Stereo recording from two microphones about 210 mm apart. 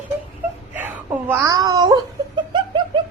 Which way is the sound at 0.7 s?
10° right (ahead or behind).